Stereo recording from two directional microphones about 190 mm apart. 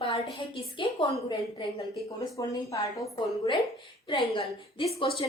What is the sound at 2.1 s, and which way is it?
Speech, 20° left (ahead or behind).